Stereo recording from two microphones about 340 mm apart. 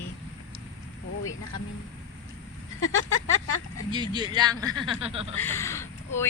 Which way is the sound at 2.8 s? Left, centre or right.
Left.